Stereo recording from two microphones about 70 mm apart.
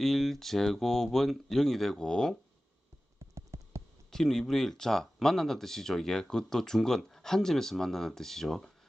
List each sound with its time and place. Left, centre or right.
0.0 s speech: centre
3.3 s a sound: right
4.1 s speech: centre